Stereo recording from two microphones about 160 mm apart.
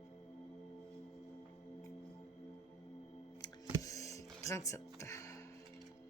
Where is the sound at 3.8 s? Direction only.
20° left (ahead or behind).